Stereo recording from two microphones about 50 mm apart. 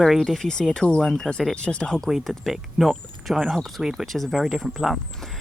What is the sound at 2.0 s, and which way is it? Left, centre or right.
Speech, centre.